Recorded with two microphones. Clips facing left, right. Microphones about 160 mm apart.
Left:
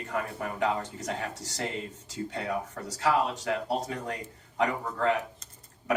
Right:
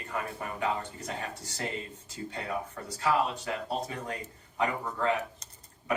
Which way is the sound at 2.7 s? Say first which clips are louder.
Left 1 dB; 90° left.